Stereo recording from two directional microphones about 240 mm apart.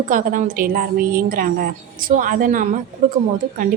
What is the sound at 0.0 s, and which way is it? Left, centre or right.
A woman's voice, right.